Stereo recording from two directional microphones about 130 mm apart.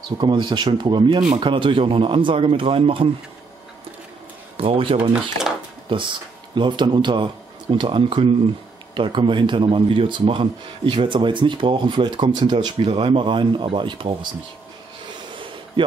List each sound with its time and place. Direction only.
0.2 s speech: 35° right (ahead or behind)
4.6 s speech: 45° right (ahead or behind)
15.3 s a sound: 40° right (ahead or behind)